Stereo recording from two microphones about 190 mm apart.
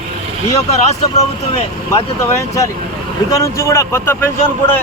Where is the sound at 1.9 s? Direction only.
15° left (ahead or behind).